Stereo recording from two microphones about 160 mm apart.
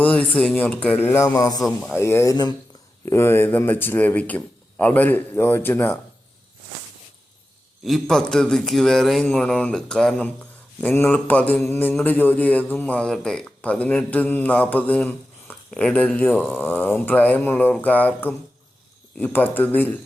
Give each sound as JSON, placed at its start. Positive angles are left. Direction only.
{"t": 0.0, "sound": "a man's voice", "side_deg": 5}
{"t": 7.9, "sound": "a man's voice", "side_deg": 0}